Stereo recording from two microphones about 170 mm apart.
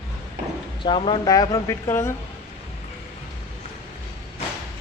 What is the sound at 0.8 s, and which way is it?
Speech, 30° left (ahead or behind).